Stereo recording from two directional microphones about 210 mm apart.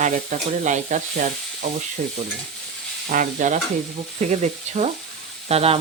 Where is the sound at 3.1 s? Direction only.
40° right (ahead or behind).